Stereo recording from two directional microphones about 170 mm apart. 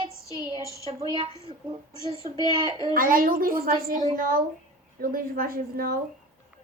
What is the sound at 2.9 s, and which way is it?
A woman's voice, 55° right (ahead or behind).